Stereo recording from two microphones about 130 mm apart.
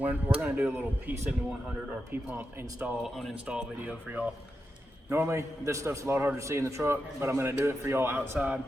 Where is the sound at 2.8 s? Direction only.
5° right (ahead or behind).